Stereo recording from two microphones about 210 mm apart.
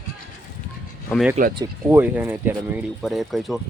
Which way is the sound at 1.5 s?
15° right (ahead or behind).